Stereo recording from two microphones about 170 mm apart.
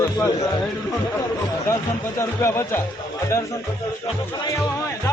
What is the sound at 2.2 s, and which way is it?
Speech, 15° left (ahead or behind).